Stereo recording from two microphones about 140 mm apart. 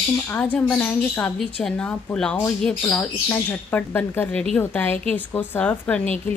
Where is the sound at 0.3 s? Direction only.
10° left (ahead or behind).